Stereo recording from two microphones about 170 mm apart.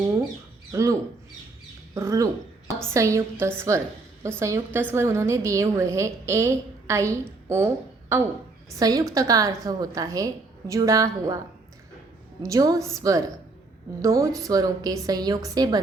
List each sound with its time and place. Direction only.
0.7 s speech: 20° right (ahead or behind)
2.0 s a woman's voice: 20° right (ahead or behind)
8.8 s a woman's voice: 20° right (ahead or behind)
12.4 s a woman's voice: 20° right (ahead or behind)